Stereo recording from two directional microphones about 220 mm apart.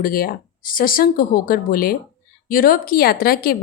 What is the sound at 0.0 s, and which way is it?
Speech, 40° left (ahead or behind).